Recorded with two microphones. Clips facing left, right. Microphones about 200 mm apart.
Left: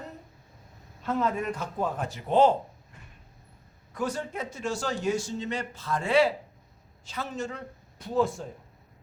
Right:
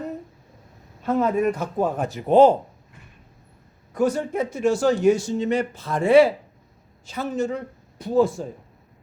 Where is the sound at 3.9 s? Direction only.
55° right (ahead or behind).